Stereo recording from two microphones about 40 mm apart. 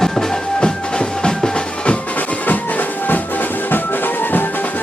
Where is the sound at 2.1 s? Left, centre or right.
Left.